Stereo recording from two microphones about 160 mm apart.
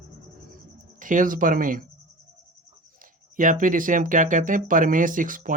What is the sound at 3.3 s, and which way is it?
Speech, 55° right (ahead or behind).